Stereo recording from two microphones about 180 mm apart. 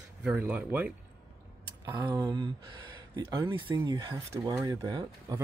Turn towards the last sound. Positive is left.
turn(degrees=-20)  # may be behind; listen again after turning